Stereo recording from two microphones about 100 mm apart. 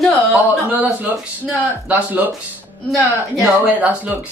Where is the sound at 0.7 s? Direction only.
15° right (ahead or behind).